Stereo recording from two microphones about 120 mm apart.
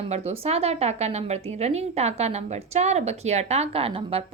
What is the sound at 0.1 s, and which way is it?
A woman's voice, 60° right (ahead or behind).